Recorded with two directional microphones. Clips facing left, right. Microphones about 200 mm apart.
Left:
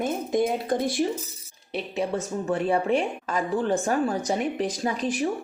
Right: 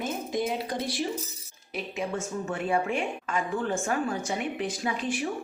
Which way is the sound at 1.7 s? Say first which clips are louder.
Left 4 dB; 35° left (ahead or behind).